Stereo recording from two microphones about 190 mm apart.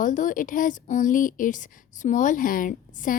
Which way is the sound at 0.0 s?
45° left (ahead or behind).